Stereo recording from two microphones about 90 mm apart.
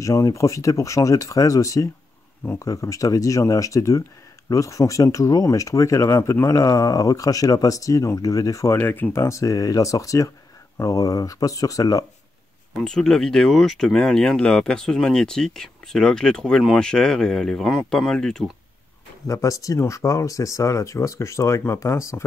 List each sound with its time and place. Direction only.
0.0 s speech: 35° left (ahead or behind)
8.7 s speech: 25° left (ahead or behind); by 12.0 s 40° left (ahead or behind)
12.8 s speech: 5° left (ahead or behind)
19.2 s speech: 40° left (ahead or behind)